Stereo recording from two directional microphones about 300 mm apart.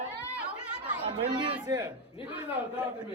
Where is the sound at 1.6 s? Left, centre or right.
Centre.